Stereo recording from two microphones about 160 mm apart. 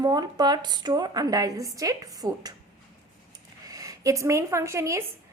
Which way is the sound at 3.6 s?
25° right (ahead or behind).